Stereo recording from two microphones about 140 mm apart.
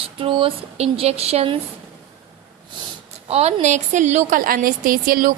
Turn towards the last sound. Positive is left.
turn(degrees=-90)